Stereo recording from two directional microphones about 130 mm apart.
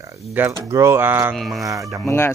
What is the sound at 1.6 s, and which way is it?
Speech, 25° right (ahead or behind).